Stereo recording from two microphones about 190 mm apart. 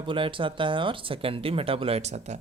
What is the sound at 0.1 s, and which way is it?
Speech, 25° right (ahead or behind).